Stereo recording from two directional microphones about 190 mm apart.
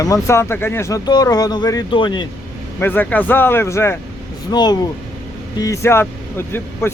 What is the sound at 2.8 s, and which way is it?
Speech, 10° left (ahead or behind).